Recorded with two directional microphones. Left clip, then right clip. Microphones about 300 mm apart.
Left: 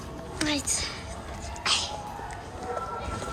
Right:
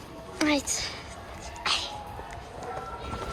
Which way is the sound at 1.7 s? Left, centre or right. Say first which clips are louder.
Left 2 dB; centre.